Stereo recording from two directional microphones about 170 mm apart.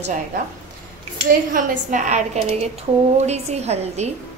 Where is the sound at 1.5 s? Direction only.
50° right (ahead or behind).